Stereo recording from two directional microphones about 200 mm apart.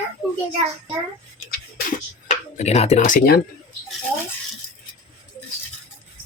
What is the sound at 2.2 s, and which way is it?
Speech, 35° left (ahead or behind).